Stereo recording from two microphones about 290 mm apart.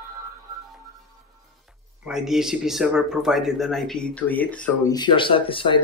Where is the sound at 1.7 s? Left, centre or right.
Centre.